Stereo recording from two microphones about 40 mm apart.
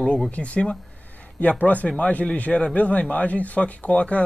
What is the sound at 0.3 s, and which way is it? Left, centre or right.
A man's voice, left.